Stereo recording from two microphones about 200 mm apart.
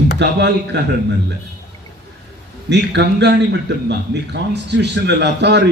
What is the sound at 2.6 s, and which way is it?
A man's voice, 60° right (ahead or behind).